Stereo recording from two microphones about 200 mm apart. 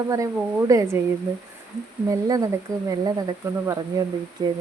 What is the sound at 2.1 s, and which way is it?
Speech, 15° right (ahead or behind).